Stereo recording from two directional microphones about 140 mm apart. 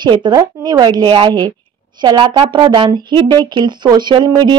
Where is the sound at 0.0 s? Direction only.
35° right (ahead or behind).